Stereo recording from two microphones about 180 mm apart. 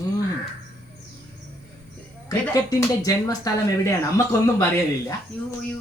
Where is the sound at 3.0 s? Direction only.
20° left (ahead or behind).